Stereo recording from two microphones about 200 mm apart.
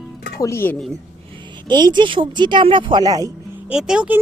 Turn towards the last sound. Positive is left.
turn(degrees=-5)  # may be behind; listen again after turning